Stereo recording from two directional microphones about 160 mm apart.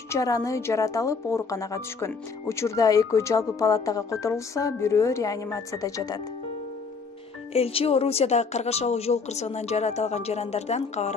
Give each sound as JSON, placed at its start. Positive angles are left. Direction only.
{"t": 0.1, "sound": "speech", "side_deg": 20}
{"t": 7.5, "sound": "speech", "side_deg": 40}